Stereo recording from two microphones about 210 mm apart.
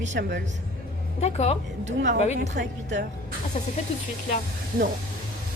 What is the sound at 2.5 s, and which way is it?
Speech, 55° right (ahead or behind).